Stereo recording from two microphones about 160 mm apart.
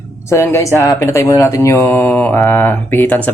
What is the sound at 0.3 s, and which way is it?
Speech, 15° left (ahead or behind).